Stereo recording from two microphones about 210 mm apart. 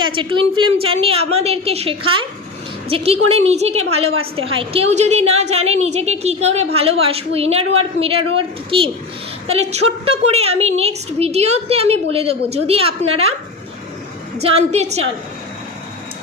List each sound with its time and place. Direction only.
0.0 s a woman's voice: 25° right (ahead or behind)
14.4 s a woman's voice: 30° right (ahead or behind)